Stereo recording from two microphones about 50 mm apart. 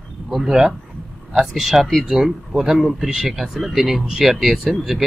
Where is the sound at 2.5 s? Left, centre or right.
Centre.